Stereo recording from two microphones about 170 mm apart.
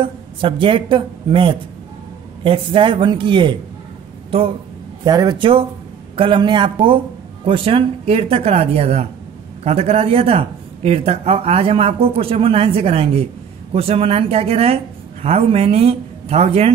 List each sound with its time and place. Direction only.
0.0 s speech: 30° right (ahead or behind)
5.0 s speech: 25° right (ahead or behind)